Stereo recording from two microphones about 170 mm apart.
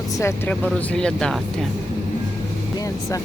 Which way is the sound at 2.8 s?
20° left (ahead or behind).